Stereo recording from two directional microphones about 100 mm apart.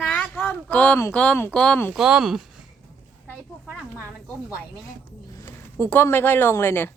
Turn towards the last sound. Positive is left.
turn(degrees=20)  # may be behind; listen again after turning